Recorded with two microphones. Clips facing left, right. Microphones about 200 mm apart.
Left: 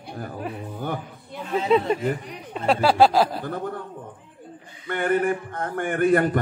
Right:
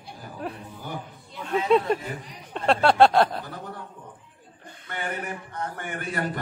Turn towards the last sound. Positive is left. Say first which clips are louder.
# left 11 dB
turn(degrees=55)  # may be behind; listen again after turning